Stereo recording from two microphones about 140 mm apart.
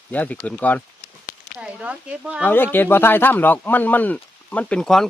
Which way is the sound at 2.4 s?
15° left (ahead or behind).